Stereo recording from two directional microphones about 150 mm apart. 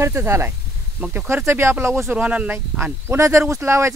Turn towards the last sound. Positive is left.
turn(degrees=-20)  # may be behind; listen again after turning